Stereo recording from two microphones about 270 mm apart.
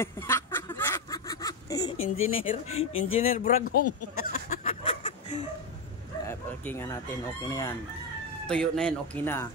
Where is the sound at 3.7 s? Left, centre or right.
Left.